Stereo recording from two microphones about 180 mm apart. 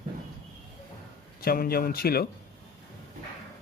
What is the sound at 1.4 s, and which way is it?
Speech, 55° left (ahead or behind).